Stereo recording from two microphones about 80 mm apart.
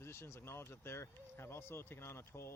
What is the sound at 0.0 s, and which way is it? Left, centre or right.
Speech, left.